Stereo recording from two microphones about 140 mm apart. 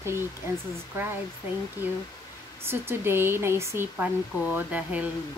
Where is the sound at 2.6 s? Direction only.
15° right (ahead or behind).